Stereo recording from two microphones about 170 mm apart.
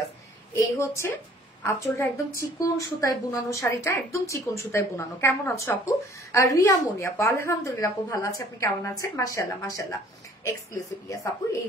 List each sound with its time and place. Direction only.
0.5 s a woman's voice: 15° left (ahead or behind)